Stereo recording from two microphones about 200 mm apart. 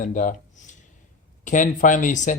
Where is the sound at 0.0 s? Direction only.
40° left (ahead or behind).